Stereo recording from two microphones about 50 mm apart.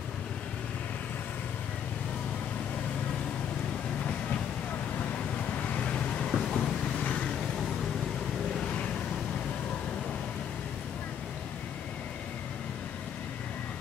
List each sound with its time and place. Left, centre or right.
5.6 s vehicle: left